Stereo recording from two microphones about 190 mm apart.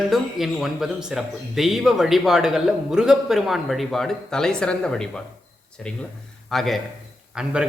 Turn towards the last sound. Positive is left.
turn(degrees=-5)  # may be behind; listen again after turning